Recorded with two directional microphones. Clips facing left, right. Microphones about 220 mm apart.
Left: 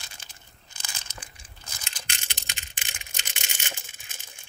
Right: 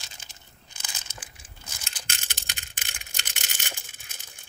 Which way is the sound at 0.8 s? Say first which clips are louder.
Left 1 dB; 5° right (ahead or behind).